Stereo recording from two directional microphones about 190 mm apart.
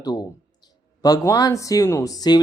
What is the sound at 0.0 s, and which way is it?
Speech, 20° left (ahead or behind).